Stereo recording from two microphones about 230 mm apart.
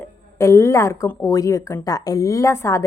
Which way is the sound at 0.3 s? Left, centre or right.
Centre.